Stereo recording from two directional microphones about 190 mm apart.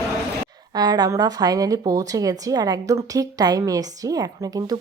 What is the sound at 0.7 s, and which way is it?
Speech, 20° right (ahead or behind).